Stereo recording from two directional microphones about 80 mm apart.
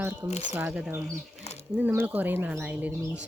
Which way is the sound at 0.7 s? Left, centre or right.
Centre.